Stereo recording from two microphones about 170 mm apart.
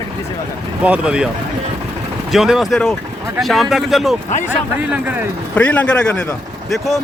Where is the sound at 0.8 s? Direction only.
5° right (ahead or behind).